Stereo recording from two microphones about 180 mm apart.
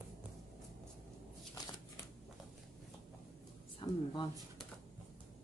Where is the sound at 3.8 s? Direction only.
25° left (ahead or behind).